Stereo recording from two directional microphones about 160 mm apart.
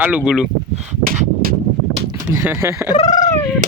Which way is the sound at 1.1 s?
60° right (ahead or behind).